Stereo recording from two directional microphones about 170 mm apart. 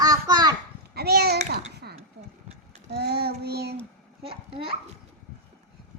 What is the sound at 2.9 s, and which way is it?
Child singing, 70° right (ahead or behind).